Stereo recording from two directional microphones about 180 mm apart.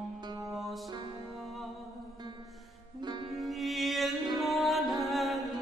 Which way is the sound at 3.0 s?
25° right (ahead or behind).